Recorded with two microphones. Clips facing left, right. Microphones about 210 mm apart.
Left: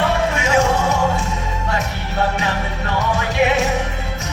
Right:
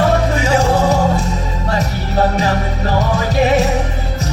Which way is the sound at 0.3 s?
35° right (ahead or behind).